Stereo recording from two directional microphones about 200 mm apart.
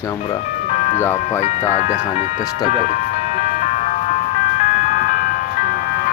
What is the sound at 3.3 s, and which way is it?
Ice cream truck, 35° left (ahead or behind).